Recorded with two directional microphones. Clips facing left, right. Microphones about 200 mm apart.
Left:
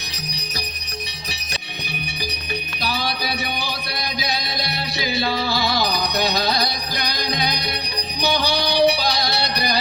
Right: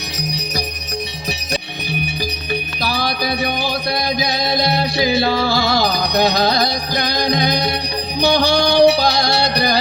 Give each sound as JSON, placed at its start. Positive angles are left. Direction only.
{"t": 2.8, "sound": "music", "side_deg": -45}